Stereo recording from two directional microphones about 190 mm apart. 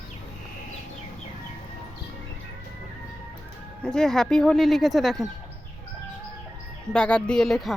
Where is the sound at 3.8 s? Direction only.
5° left (ahead or behind).